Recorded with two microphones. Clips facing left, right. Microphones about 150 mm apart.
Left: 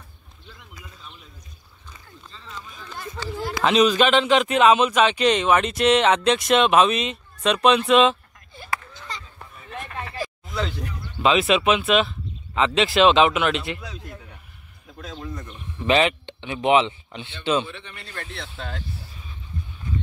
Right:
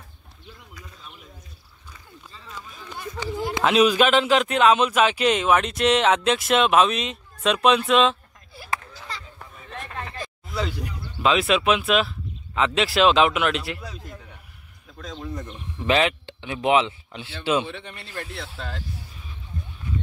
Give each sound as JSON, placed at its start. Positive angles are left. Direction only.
{"t": 2.3, "sound": "a sound", "side_deg": -10}
{"t": 3.6, "sound": "speech", "side_deg": -10}
{"t": 8.5, "sound": "a sound", "side_deg": -10}
{"t": 11.2, "sound": "speech", "side_deg": 0}
{"t": 15.1, "sound": "speech", "side_deg": -20}
{"t": 15.9, "sound": "speech", "side_deg": 0}
{"t": 17.6, "sound": "speech", "side_deg": -55}
{"t": 18.1, "sound": "speech", "side_deg": -5}